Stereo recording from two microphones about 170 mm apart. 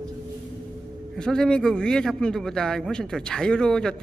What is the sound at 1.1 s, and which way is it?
A man's voice, 5° left (ahead or behind).